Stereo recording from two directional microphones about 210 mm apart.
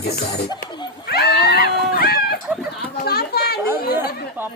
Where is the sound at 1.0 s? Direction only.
50° left (ahead or behind).